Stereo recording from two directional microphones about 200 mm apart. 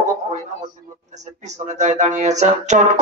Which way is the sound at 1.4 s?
35° right (ahead or behind).